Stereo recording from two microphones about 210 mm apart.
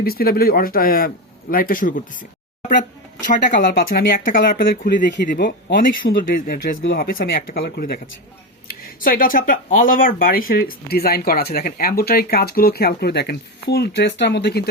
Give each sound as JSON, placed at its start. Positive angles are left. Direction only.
{"t": 0.0, "sound": "speech", "side_deg": 45}
{"t": 3.5, "sound": "speech", "side_deg": 45}